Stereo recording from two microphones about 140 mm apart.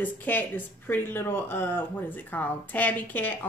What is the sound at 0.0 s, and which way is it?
Speech, 10° left (ahead or behind).